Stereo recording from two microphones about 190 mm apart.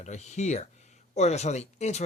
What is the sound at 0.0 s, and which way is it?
Speech, 35° left (ahead or behind).